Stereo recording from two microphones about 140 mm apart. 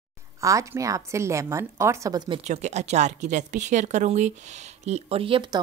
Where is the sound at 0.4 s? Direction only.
25° right (ahead or behind).